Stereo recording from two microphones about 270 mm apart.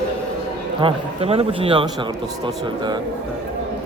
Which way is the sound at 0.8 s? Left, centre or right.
Centre.